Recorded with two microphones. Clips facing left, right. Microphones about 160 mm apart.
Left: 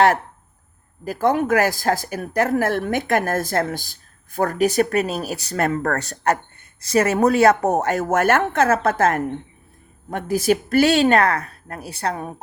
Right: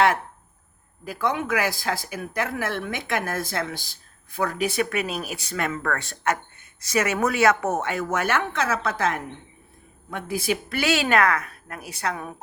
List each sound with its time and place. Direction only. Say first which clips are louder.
1.0 s speech: left 7 dB; 45° left (ahead or behind)